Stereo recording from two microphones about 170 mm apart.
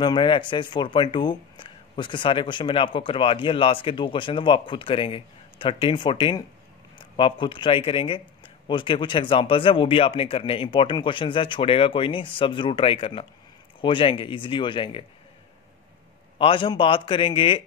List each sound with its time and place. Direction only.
0.0 s speech: 25° left (ahead or behind)
16.3 s speech: 30° left (ahead or behind)